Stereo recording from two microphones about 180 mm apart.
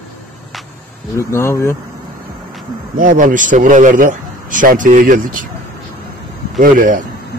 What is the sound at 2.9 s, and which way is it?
Speech, 50° right (ahead or behind).